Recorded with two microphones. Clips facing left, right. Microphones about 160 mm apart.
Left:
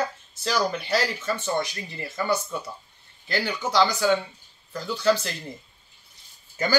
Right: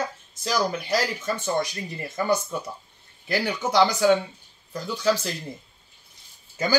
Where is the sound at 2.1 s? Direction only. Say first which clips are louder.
Right 2 dB; 15° right (ahead or behind).